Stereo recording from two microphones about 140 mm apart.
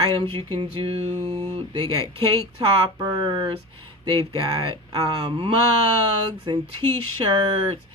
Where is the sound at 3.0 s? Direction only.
25° right (ahead or behind).